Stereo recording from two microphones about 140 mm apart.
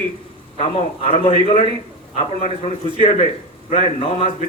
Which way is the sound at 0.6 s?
50° left (ahead or behind).